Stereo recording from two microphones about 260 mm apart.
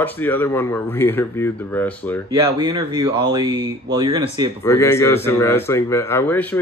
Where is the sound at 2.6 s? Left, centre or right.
Centre.